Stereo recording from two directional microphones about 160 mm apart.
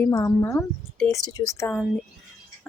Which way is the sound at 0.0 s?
15° left (ahead or behind).